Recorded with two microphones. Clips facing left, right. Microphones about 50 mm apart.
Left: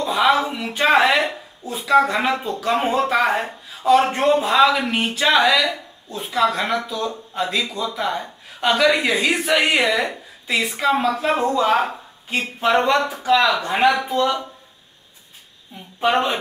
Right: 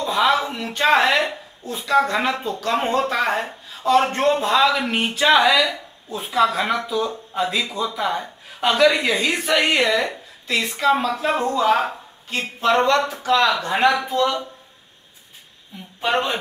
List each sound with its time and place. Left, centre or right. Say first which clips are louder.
0.0 s a woman's voice: left 1 dB; centre
13.5 s a woman's voice: left 1 dB; centre
13.7 s a woman's voice: left 1 dB; centre